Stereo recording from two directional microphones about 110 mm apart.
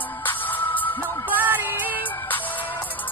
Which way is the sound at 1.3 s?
15° right (ahead or behind).